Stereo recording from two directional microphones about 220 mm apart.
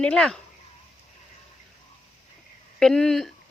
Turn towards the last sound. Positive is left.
turn(degrees=0)  # may be behind; listen again after turning